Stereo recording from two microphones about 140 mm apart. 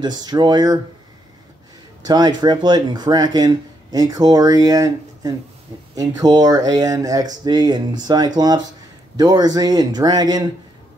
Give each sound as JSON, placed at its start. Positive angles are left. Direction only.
{"t": 0.0, "sound": "speech", "side_deg": -30}
{"t": 2.0, "sound": "speech", "side_deg": -30}